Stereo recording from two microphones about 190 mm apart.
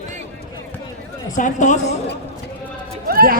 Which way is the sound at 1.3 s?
40° left (ahead or behind).